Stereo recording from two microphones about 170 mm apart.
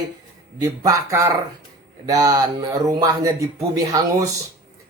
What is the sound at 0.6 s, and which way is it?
Speech, 20° right (ahead or behind).